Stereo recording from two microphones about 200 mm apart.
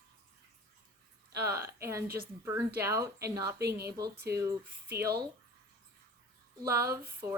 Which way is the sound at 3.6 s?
50° right (ahead or behind).